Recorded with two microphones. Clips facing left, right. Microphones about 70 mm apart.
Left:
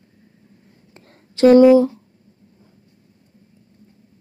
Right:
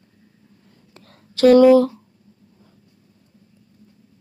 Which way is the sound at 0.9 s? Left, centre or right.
Left.